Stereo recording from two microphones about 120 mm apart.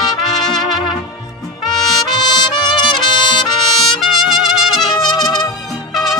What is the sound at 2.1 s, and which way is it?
Trumpet, 35° left (ahead or behind).